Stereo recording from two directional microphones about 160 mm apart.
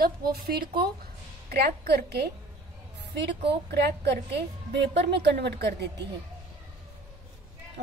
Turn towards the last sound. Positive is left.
turn(degrees=-90)